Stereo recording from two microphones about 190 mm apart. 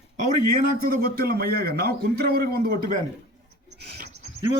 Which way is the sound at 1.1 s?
50° right (ahead or behind).